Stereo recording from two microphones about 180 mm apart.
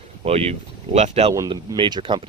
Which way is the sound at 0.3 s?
35° right (ahead or behind).